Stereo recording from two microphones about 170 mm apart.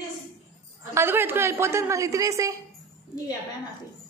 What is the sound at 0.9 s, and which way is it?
A woman's voice, 15° right (ahead or behind).